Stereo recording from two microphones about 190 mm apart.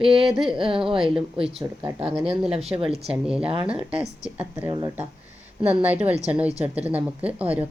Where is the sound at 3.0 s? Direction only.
5° right (ahead or behind).